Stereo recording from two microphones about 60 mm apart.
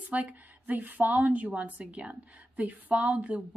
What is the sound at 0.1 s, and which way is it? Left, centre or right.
A woman's voice, right.